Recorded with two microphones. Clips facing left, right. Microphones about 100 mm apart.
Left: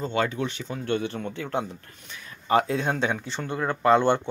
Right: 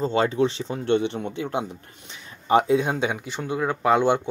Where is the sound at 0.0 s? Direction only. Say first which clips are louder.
Right 5 dB; 30° right (ahead or behind).